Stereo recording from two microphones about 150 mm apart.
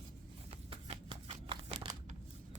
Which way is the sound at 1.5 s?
35° right (ahead or behind).